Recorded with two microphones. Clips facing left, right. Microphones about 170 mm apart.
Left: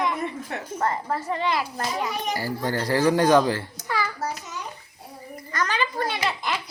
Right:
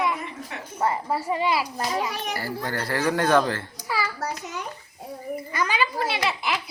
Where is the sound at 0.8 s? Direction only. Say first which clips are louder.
Right 2 dB; 10° right (ahead or behind).